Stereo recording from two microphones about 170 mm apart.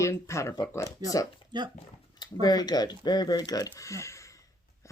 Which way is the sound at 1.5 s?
25° right (ahead or behind).